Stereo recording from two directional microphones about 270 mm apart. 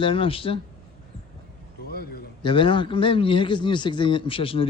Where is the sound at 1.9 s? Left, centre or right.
Left.